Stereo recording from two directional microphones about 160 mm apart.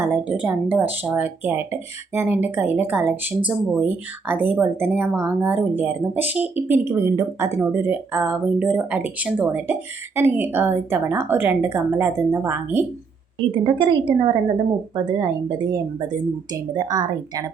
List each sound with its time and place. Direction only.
0.0 s speech: 10° right (ahead or behind)
13.5 s a woman's voice: 30° right (ahead or behind)